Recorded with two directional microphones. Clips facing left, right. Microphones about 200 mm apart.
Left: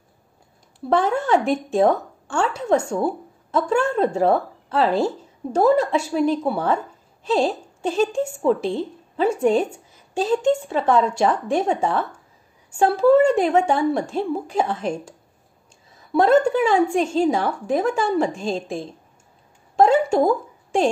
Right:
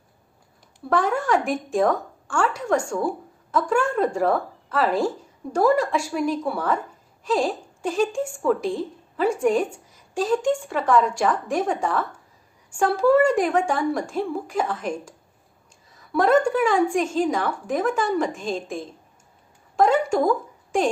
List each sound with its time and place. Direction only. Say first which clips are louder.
0.8 s a woman's voice: left 2 dB; 25° left (ahead or behind)